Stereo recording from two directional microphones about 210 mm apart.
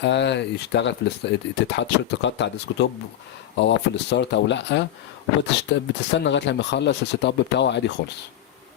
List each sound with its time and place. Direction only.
0.0 s speech: 55° left (ahead or behind)